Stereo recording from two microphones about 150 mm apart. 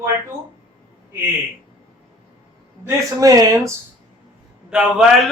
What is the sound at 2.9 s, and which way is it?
Speech, 20° right (ahead or behind).